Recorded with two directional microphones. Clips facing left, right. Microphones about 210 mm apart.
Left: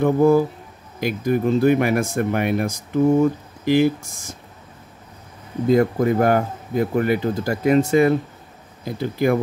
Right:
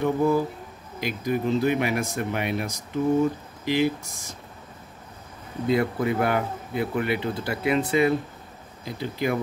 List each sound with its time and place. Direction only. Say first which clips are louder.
0.0 s speech: left 7 dB; 50° left (ahead or behind)
5.7 s speech: left 6 dB; 45° left (ahead or behind)